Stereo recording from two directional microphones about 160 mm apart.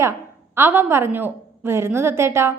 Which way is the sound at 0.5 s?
15° right (ahead or behind).